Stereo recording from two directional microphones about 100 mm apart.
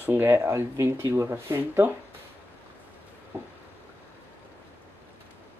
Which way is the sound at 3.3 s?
25° right (ahead or behind).